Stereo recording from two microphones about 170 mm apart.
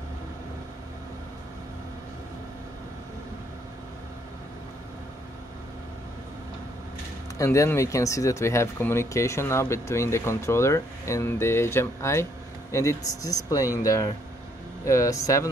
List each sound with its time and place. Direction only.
7.3 s speech: 15° left (ahead or behind)